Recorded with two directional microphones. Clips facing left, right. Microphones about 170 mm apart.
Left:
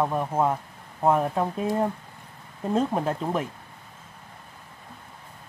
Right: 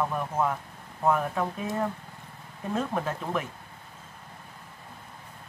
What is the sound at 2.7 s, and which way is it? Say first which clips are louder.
Speech: left 5 dB; 35° left (ahead or behind).